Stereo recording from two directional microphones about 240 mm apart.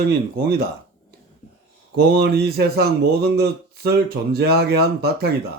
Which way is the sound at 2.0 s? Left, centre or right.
Right.